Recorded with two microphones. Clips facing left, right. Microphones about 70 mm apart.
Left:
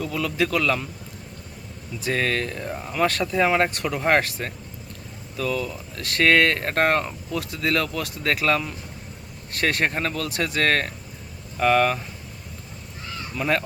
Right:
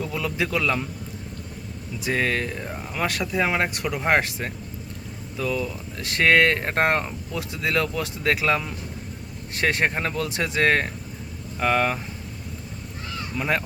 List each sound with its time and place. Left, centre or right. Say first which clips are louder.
0.0 s speech: left 2 dB; right
2.0 s speech: even; centre
13.3 s speech: left 2 dB; centre